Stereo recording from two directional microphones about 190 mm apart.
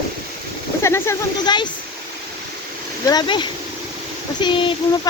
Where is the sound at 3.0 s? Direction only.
25° left (ahead or behind).